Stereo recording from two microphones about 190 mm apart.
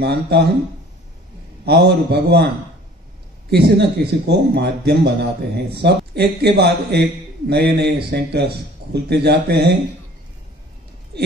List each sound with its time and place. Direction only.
0.0 s a man's voice: 60° right (ahead or behind)
1.7 s a man's voice: 60° right (ahead or behind)
3.4 s a man's voice: 60° right (ahead or behind)
11.1 s speech: 60° right (ahead or behind)